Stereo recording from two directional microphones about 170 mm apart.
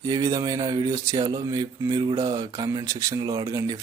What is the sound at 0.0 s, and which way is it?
Speech, 20° right (ahead or behind).